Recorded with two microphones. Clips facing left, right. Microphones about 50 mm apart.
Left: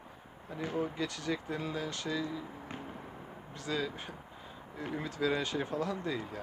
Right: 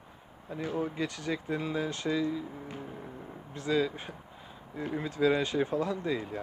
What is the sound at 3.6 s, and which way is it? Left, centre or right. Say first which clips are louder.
Speech: right 7 dB; centre.